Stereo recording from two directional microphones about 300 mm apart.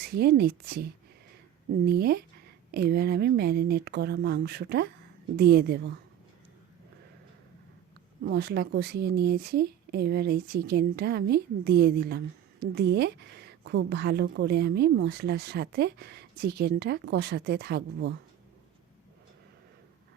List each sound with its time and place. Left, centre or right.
0.0 s a woman's voice: right
8.2 s a woman's voice: right